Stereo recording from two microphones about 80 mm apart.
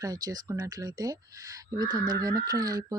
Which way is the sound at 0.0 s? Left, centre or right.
Right.